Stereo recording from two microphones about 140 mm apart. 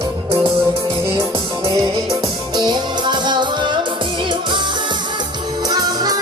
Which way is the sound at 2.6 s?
35° right (ahead or behind).